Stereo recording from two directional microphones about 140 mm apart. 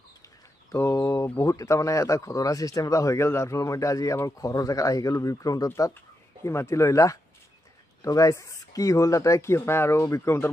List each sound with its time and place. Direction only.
0.7 s speech: 20° left (ahead or behind)